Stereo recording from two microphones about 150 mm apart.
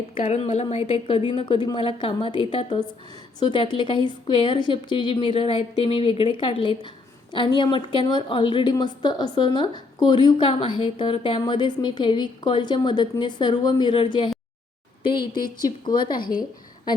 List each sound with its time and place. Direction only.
0.1 s a woman's voice: 40° left (ahead or behind)